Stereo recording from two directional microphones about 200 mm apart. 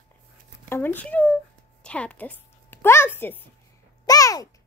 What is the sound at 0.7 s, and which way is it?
A woman's voice, 10° left (ahead or behind).